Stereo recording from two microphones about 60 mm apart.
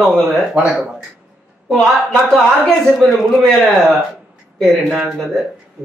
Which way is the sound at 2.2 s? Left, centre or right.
Centre.